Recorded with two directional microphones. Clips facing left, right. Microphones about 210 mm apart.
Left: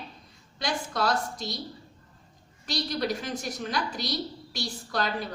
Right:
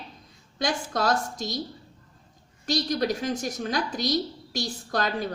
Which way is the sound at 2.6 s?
45° right (ahead or behind).